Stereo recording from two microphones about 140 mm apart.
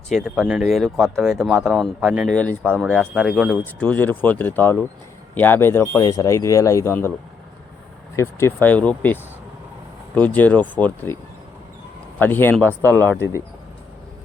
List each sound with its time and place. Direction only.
0.1 s speech: 5° right (ahead or behind)
2.3 s speech: 10° left (ahead or behind)
3.6 s speech: 10° left (ahead or behind)
6.0 s speech: 25° left (ahead or behind)
8.1 s speech: 20° left (ahead or behind)
10.2 s speech: 10° left (ahead or behind)
12.2 s speech: 15° left (ahead or behind)